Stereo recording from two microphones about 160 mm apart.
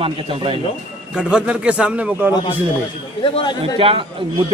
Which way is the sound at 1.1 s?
5° right (ahead or behind).